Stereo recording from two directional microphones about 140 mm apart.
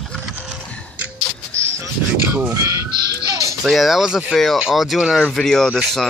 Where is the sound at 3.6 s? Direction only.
Centre (ahead or behind).